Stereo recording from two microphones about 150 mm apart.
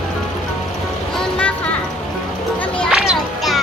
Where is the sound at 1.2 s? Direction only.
10° left (ahead or behind).